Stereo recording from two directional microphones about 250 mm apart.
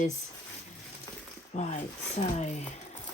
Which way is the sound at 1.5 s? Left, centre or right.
Left.